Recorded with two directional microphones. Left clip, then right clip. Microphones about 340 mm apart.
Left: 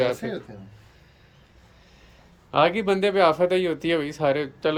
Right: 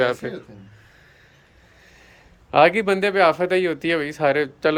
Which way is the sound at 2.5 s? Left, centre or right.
Centre.